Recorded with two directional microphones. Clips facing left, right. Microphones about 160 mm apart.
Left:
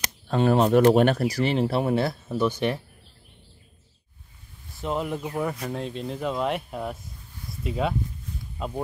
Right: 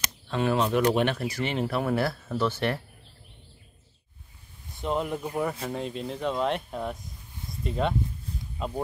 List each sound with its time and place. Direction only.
0.3 s speech: 40° left (ahead or behind); by 2.8 s 15° left (ahead or behind)
4.7 s speech: centre (ahead or behind)